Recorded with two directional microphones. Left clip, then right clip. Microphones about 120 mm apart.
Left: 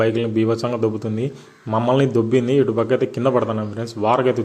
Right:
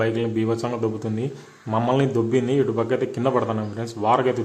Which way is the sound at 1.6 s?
20° left (ahead or behind).